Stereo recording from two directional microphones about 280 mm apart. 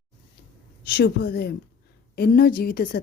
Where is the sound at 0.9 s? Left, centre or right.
Left.